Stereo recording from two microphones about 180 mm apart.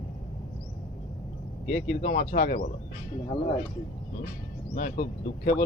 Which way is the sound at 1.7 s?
55° left (ahead or behind).